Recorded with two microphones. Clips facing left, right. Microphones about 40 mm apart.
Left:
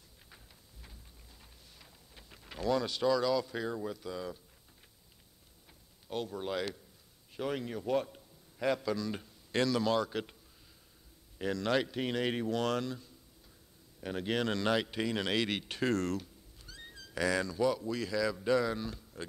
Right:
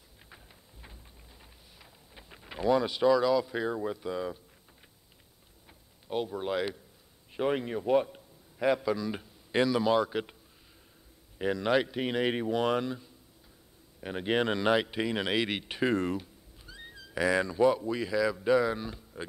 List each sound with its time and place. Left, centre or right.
1.8 s speech: right
6.0 s a man's voice: centre
11.3 s speech: centre